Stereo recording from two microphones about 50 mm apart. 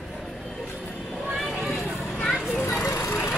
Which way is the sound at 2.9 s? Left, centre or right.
Left.